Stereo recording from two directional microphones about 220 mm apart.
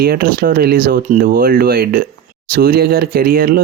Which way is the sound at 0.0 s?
40° right (ahead or behind).